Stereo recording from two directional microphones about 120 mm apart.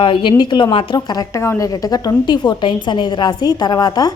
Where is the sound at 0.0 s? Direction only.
45° left (ahead or behind).